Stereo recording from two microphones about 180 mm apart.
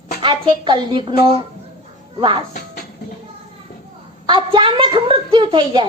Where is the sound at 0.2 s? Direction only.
25° right (ahead or behind).